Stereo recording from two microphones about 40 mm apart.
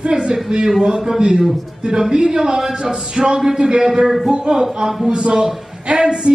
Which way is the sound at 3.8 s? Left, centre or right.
Centre.